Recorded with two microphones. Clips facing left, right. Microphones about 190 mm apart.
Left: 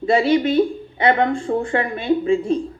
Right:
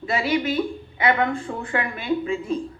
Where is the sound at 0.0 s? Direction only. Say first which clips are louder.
Left 7 dB; 30° left (ahead or behind).